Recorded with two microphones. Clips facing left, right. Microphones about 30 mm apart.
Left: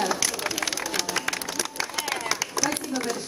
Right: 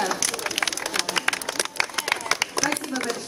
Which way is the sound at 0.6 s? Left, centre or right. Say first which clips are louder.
Right 2 dB; right.